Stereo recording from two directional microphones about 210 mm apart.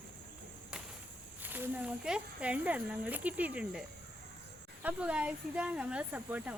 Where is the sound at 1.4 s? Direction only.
10° right (ahead or behind).